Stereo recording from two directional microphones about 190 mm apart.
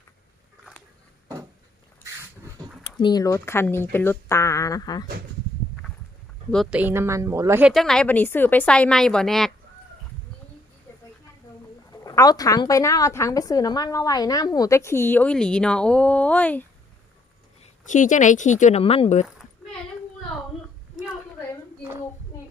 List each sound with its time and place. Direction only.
2.8 s a woman's voice: 25° left (ahead or behind)
6.5 s speech: centre (ahead or behind)
7.7 s a woman's voice: centre (ahead or behind)
11.9 s a woman's voice: 20° left (ahead or behind)
17.8 s speech: 40° left (ahead or behind)